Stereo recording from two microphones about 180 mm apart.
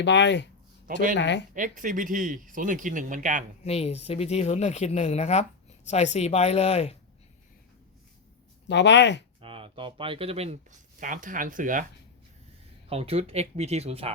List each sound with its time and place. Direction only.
0.0 s speech: 75° left (ahead or behind)
1.5 s speech: 45° right (ahead or behind)
3.6 s speech: 35° left (ahead or behind)
8.6 s speech: 75° left (ahead or behind)
9.4 s speech: 30° right (ahead or behind); by 11.9 s 45° right (ahead or behind)
12.9 s speech: 35° right (ahead or behind)